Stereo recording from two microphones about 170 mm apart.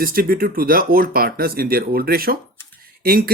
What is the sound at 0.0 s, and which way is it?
Speech, 60° right (ahead or behind).